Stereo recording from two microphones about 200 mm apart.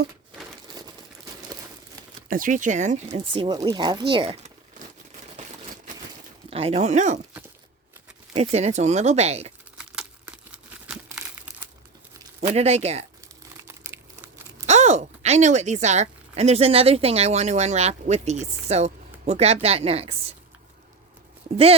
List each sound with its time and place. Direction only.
2.3 s speech: 40° right (ahead or behind)
3.3 s speech: 20° right (ahead or behind)
6.5 s speech: 30° right (ahead or behind)
8.4 s speech: 35° right (ahead or behind)
9.7 s crumpling: 5° right (ahead or behind)
12.5 s speech: 30° right (ahead or behind)
13.8 s crumpling: 10° right (ahead or behind)
14.7 s speech: 35° right (ahead or behind)